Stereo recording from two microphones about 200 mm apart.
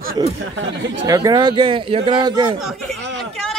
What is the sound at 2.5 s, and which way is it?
Speech, centre (ahead or behind).